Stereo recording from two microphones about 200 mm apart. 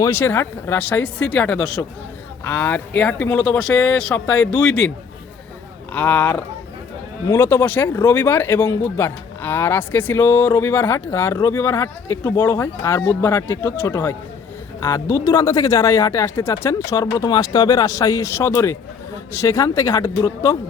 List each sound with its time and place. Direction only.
0.0 s speech: 10° left (ahead or behind)
5.9 s speech: 5° left (ahead or behind)